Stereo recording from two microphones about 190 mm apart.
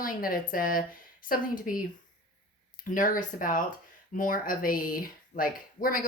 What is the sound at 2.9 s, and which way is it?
Speech, 45° left (ahead or behind).